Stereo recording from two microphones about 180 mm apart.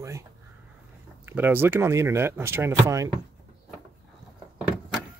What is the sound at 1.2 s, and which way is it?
Speech, 10° right (ahead or behind).